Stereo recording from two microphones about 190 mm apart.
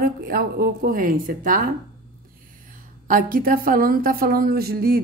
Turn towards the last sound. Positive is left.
turn(degrees=-55)  # may be behind; listen again after turning